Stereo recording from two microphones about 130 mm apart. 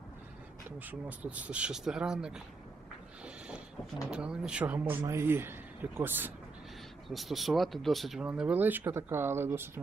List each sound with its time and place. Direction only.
0.8 s a man's voice: 15° right (ahead or behind)
3.2 s a sound: 10° right (ahead or behind)
4.1 s a man's voice: 5° right (ahead or behind)
7.1 s a man's voice: centre (ahead or behind); by 9.8 s 20° right (ahead or behind)